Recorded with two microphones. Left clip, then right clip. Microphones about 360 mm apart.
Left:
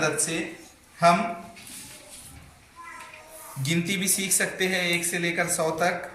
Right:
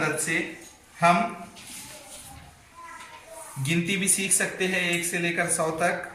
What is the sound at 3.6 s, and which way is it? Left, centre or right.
Speech, centre.